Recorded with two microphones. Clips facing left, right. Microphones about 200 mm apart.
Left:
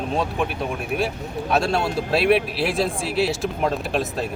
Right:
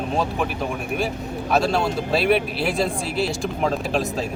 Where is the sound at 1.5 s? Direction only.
Centre (ahead or behind).